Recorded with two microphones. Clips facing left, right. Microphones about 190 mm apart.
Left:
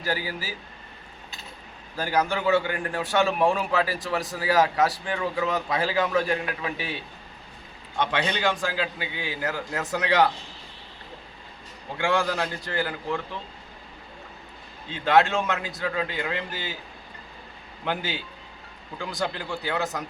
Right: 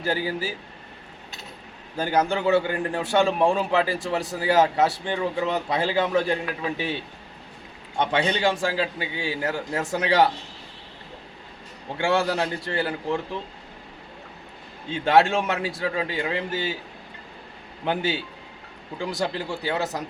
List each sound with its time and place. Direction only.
0.0 s a man's voice: 25° right (ahead or behind)
2.0 s a man's voice: 25° right (ahead or behind)
8.1 s a man's voice: 30° right (ahead or behind)
11.9 s a man's voice: 25° right (ahead or behind)
15.0 s a man's voice: 30° right (ahead or behind)
18.9 s a man's voice: 25° right (ahead or behind)